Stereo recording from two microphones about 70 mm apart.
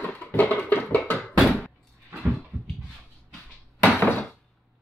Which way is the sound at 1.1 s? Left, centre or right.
Centre.